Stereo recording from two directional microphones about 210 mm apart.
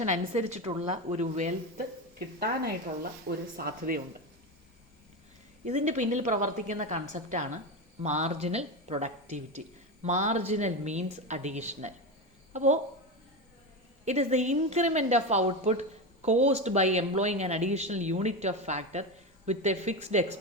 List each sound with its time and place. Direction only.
0.0 s a woman's voice: 35° right (ahead or behind)
3.0 s speech: 45° right (ahead or behind)
5.6 s a woman's voice: 35° right (ahead or behind)
14.0 s a woman's voice: 30° right (ahead or behind)